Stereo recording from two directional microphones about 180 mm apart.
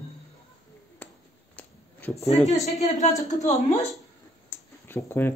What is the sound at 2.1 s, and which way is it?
Speech, 35° left (ahead or behind).